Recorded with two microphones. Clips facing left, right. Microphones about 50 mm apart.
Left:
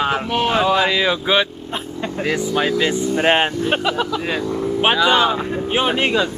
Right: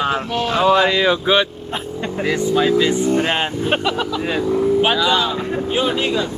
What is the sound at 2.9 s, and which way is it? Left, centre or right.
Speech, right.